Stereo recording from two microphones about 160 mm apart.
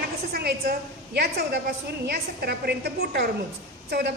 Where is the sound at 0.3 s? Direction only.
75° right (ahead or behind).